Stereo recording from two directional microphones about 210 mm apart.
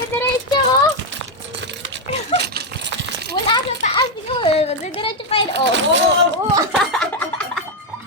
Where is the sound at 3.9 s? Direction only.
25° left (ahead or behind).